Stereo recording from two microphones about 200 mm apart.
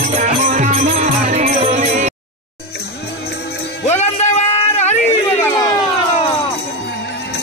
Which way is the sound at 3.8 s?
35° left (ahead or behind).